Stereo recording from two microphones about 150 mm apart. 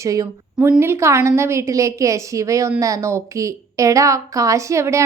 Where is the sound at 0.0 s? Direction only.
20° right (ahead or behind).